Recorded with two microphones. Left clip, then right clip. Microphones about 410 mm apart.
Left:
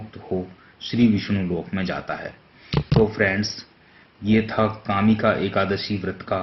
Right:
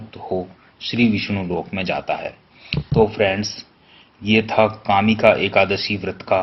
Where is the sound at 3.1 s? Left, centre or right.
Right.